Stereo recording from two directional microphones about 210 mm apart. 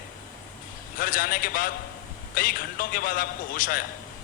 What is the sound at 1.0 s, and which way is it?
A man's voice, 40° left (ahead or behind).